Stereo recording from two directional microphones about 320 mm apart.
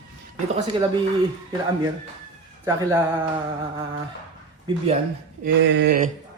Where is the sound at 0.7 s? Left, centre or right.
Centre.